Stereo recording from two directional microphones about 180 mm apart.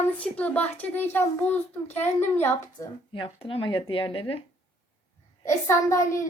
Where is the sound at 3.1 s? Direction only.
30° left (ahead or behind).